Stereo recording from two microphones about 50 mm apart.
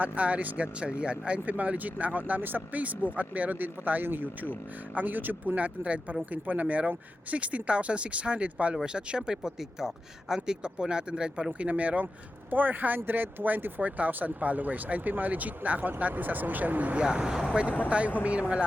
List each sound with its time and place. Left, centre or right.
0.0 s speech: right
17.0 s speech: centre
17.8 s speech: right